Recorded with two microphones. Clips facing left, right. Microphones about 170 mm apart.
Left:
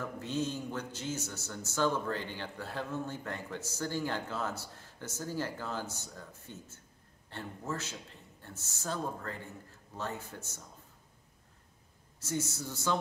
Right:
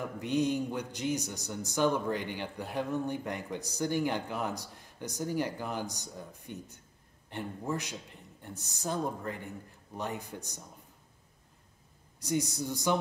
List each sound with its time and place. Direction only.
0.0 s speech: 15° right (ahead or behind)
12.2 s speech: 15° right (ahead or behind)